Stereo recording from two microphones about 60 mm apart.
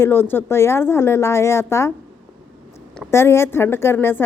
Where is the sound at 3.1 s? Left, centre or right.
Left.